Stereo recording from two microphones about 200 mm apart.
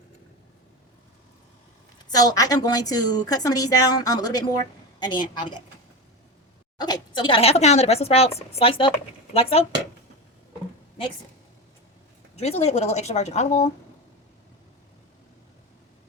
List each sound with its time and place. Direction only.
2.0 s a woman's voice: 20° left (ahead or behind)
6.7 s a woman's voice: 20° left (ahead or behind)
12.4 s a woman's voice: 30° left (ahead or behind)